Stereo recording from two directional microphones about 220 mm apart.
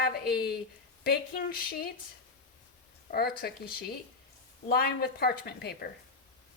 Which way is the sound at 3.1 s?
45° left (ahead or behind).